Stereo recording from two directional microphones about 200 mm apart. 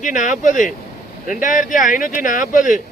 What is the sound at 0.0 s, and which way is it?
Speech, 40° left (ahead or behind).